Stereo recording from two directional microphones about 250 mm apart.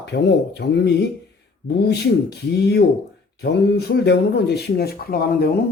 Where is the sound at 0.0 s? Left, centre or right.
Left.